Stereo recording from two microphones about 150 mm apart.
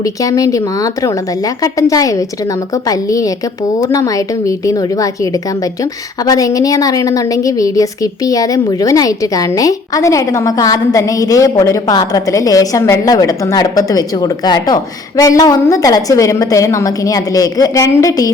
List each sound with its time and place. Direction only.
0.0 s a woman's voice: 25° left (ahead or behind)